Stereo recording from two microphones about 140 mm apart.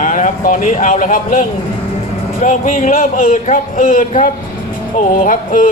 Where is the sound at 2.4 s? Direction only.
65° left (ahead or behind).